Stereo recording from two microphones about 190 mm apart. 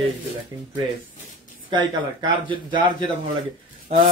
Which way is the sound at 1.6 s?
25° right (ahead or behind).